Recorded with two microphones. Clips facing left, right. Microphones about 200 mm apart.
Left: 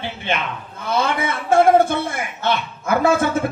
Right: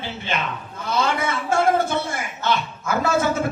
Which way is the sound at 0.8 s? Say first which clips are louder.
Left 2 dB; 55° left (ahead or behind).